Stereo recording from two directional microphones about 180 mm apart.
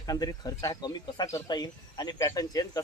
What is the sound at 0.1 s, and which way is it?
Speech, 20° left (ahead or behind).